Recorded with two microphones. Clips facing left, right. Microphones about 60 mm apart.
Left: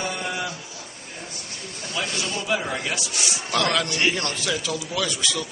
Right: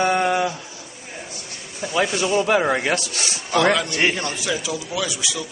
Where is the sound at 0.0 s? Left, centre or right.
Right.